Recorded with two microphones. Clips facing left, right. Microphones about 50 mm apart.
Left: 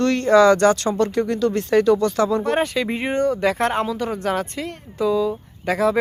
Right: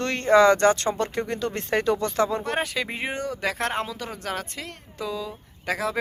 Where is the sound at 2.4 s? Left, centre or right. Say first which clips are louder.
Left 6 dB; centre.